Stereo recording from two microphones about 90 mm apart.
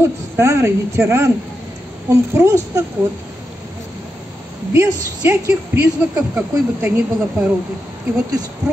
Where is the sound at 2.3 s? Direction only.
30° right (ahead or behind).